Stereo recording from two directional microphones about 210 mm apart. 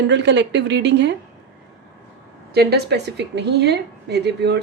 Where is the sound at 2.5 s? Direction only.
50° right (ahead or behind).